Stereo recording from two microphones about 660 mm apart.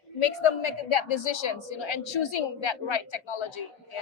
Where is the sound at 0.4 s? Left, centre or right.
Left.